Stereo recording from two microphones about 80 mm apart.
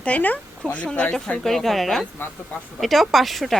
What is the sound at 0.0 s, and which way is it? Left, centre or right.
Speech, centre.